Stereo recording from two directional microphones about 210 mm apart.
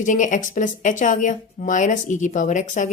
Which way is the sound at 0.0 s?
35° left (ahead or behind).